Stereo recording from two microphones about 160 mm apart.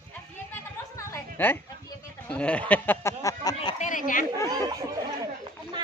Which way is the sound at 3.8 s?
55° left (ahead or behind).